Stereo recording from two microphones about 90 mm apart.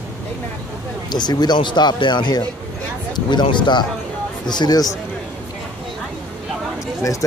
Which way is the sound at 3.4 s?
60° left (ahead or behind).